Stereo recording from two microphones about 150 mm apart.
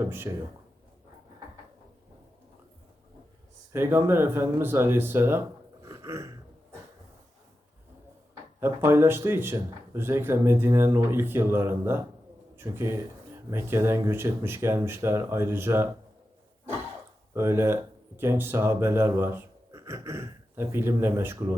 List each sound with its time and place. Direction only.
0.0 s speech: 15° right (ahead or behind)
3.7 s speech: 15° right (ahead or behind)
5.8 s a sound: 20° right (ahead or behind)
8.6 s speech: 15° right (ahead or behind)
17.3 s speech: 15° right (ahead or behind)